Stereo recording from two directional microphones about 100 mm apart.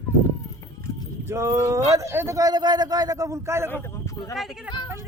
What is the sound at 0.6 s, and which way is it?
Clip-clop, 35° left (ahead or behind).